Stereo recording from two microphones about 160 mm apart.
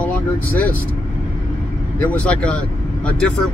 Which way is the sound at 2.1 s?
10° left (ahead or behind).